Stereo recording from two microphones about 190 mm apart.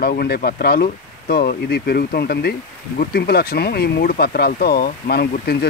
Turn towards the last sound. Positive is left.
turn(degrees=55)  # may be behind; listen again after turning